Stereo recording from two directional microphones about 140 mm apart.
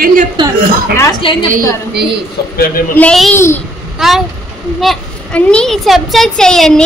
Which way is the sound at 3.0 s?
5° left (ahead or behind).